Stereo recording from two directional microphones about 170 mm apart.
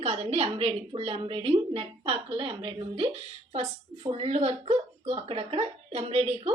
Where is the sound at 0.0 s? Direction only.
35° right (ahead or behind).